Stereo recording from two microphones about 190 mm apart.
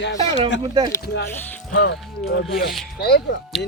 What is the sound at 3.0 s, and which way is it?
Speech, 60° left (ahead or behind).